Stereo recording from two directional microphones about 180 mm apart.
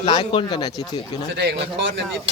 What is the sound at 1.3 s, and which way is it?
Speech, 75° right (ahead or behind).